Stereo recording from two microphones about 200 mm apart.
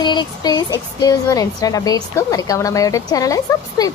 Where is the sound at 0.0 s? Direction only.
20° left (ahead or behind).